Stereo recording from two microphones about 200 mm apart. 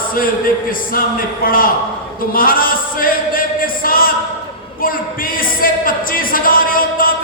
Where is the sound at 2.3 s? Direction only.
45° left (ahead or behind).